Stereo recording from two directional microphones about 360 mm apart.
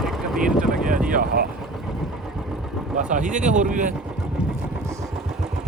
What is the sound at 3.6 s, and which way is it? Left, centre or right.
Boat, right.